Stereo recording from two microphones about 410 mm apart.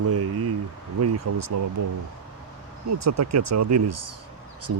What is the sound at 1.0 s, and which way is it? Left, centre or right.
Speech, right.